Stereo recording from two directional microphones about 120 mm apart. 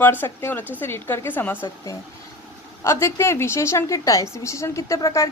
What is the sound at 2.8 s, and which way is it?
A woman's voice, 20° left (ahead or behind).